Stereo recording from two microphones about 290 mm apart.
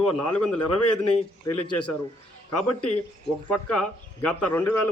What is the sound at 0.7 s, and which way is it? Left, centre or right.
Speech, left.